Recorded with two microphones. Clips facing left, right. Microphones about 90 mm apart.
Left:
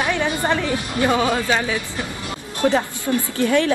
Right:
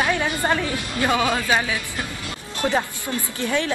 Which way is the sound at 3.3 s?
55° left (ahead or behind).